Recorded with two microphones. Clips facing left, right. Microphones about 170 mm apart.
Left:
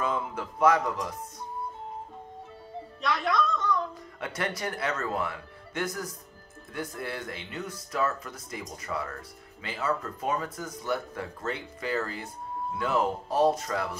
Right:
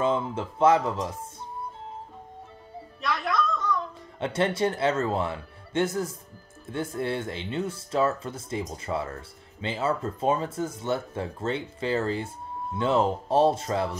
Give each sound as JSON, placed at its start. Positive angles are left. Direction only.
{"t": 0.0, "sound": "speech", "side_deg": -25}
{"t": 3.0, "sound": "music", "side_deg": 0}
{"t": 4.2, "sound": "speech", "side_deg": -25}